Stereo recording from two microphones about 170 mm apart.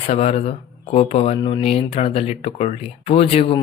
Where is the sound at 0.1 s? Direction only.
40° left (ahead or behind).